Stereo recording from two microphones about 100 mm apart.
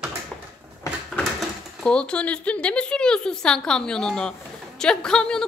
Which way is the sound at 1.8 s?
10° left (ahead or behind).